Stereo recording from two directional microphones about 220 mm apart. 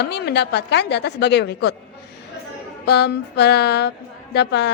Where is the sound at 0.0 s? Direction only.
50° left (ahead or behind).